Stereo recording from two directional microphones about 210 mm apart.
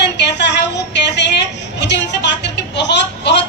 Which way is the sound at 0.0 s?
55° left (ahead or behind).